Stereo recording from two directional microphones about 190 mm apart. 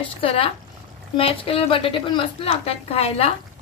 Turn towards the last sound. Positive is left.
turn(degrees=30)  # may be behind; listen again after turning